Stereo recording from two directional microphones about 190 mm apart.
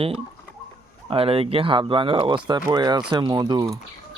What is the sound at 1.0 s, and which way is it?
Speech, 30° right (ahead or behind).